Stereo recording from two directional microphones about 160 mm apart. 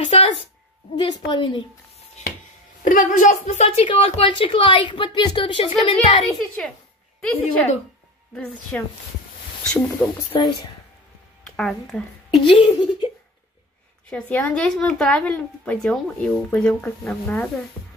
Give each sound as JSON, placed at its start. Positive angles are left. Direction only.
{"t": 0.0, "sound": "a sound", "side_deg": 35}
{"t": 0.9, "sound": "a woman's voice", "side_deg": 30}
{"t": 2.8, "sound": "a woman's voice", "side_deg": 55}
{"t": 6.3, "sound": "a child's voice", "side_deg": 5}
{"t": 8.7, "sound": "speech", "side_deg": 10}
{"t": 10.3, "sound": "a woman's voice", "side_deg": 25}
{"t": 11.4, "sound": "speech", "side_deg": 0}
{"t": 12.4, "sound": "a woman's voice", "side_deg": 30}
{"t": 14.1, "sound": "speech", "side_deg": 10}